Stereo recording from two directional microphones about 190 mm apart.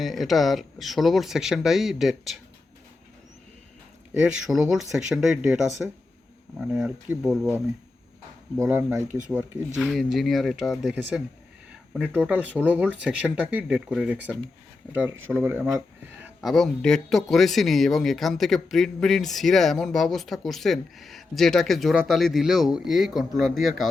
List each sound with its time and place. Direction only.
0.0 s speech: centre (ahead or behind)
4.2 s speech: 5° right (ahead or behind)
8.5 s speech: 15° right (ahead or behind)
9.0 s speech: 40° right (ahead or behind)
9.3 s speech: 5° right (ahead or behind)
16.2 s speech: centre (ahead or behind)